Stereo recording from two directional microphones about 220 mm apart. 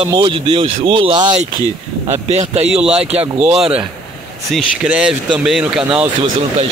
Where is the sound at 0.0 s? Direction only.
20° right (ahead or behind).